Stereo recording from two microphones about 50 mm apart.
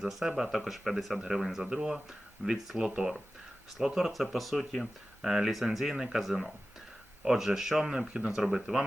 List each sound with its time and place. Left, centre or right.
0.0 s speech: centre; by 8.3 s right
8.3 s speech: centre